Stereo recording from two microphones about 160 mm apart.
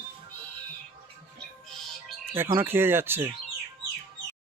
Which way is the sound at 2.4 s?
15° right (ahead or behind).